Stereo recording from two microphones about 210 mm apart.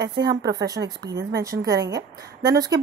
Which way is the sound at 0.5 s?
20° right (ahead or behind).